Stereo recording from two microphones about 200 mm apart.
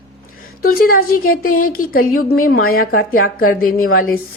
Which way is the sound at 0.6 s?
45° left (ahead or behind).